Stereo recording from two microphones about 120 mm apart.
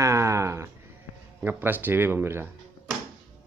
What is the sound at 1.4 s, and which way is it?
Speech, 15° right (ahead or behind).